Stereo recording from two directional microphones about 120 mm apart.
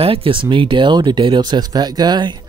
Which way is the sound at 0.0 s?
50° right (ahead or behind).